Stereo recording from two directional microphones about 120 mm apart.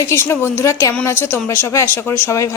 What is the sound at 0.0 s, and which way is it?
A woman's voice, 20° left (ahead or behind).